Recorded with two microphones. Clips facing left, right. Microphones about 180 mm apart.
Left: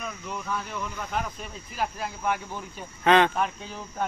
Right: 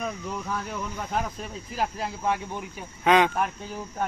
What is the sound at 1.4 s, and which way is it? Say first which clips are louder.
Speech: right 2 dB; 30° right (ahead or behind).